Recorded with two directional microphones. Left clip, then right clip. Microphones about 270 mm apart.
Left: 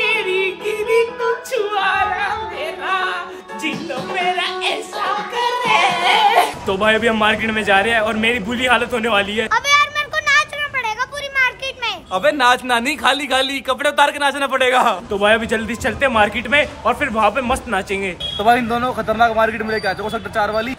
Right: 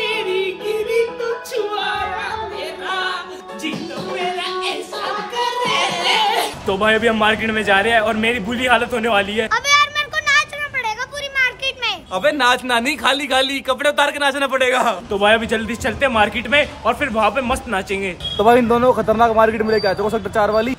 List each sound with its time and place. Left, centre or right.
5.7 s speech: centre
18.4 s speech: right